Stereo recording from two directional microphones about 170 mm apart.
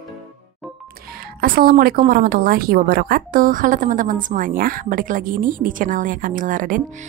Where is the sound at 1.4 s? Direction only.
60° right (ahead or behind).